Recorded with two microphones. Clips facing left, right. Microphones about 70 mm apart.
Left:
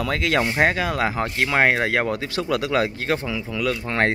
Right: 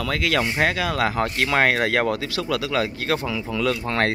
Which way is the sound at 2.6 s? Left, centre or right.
Left.